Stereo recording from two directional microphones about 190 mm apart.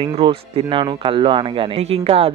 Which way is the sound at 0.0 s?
25° right (ahead or behind).